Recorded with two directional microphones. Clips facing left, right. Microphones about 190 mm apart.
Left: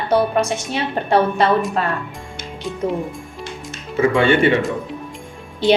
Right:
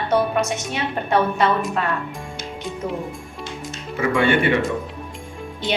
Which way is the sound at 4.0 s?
25° left (ahead or behind).